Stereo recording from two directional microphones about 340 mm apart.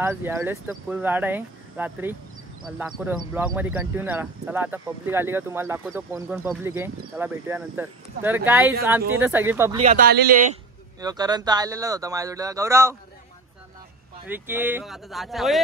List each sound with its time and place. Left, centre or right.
0.0 s a man's voice: centre
9.8 s speech: right
11.0 s a man's voice: centre
14.2 s speech: centre